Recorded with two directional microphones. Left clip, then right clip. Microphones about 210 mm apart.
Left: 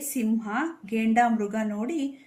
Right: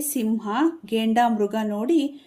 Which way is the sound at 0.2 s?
50° right (ahead or behind).